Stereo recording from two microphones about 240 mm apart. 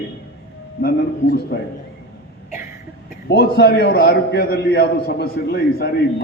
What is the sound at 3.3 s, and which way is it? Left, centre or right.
A man's voice, left.